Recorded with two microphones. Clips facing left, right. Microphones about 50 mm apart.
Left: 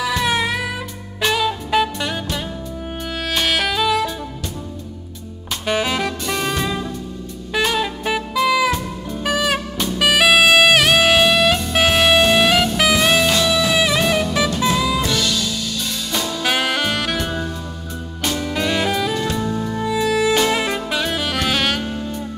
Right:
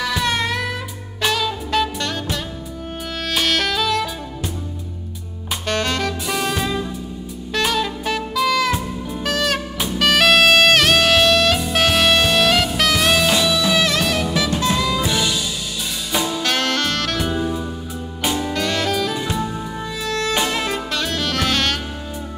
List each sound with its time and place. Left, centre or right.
0.0 s music: centre
3.3 s saxophone: centre
5.7 s music: centre
6.2 s music: centre
14.7 s music: centre
15.0 s music: centre
16.1 s saxophone: centre
16.4 s saxophone: centre
17.2 s music: centre
18.2 s music: centre
18.5 s saxophone: centre
19.1 s music: centre
19.8 s music: centre
20.4 s saxophone: centre